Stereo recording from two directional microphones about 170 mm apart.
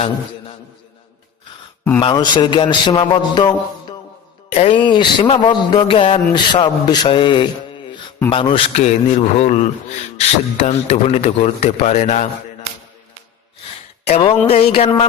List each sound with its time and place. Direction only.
2.0 s speech: 25° left (ahead or behind)
4.4 s a man's voice: 35° left (ahead or behind)
14.2 s a man's voice: 35° left (ahead or behind)